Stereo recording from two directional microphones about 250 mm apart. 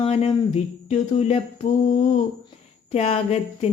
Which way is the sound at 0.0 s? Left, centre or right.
Left.